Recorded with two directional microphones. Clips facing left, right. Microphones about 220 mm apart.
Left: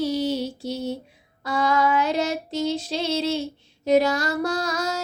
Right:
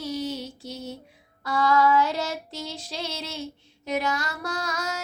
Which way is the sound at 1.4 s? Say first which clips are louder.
Even; 20° left (ahead or behind).